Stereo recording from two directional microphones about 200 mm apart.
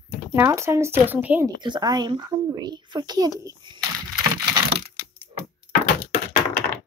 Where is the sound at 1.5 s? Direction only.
20° right (ahead or behind).